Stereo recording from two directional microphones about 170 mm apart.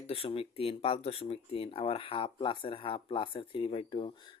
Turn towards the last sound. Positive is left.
turn(degrees=30)  # may be behind; listen again after turning